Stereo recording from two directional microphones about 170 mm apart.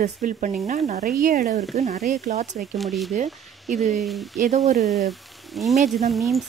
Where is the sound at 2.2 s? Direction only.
40° right (ahead or behind).